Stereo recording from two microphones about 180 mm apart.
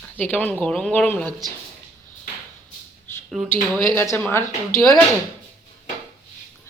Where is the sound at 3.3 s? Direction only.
Centre (ahead or behind).